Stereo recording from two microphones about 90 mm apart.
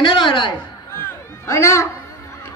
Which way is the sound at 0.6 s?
25° left (ahead or behind).